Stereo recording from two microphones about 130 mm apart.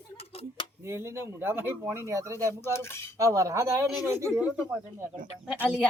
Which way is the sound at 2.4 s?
20° left (ahead or behind).